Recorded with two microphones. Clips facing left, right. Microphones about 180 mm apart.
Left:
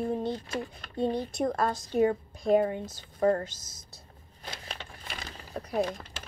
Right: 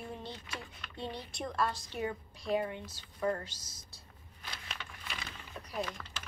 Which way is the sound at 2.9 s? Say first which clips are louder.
Left 8 dB; 45° left (ahead or behind).